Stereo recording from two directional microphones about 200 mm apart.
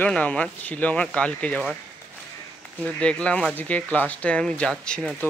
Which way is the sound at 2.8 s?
5° left (ahead or behind).